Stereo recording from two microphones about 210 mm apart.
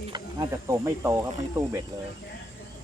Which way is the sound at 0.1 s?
15° right (ahead or behind).